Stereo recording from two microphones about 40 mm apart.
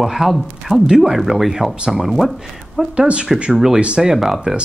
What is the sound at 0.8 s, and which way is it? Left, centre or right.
Speech, centre.